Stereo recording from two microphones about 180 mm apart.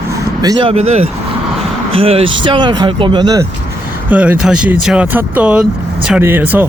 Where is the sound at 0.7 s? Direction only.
35° right (ahead or behind).